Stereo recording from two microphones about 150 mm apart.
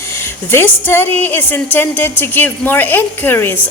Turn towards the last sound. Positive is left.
turn(degrees=15)  # may be behind; listen again after turning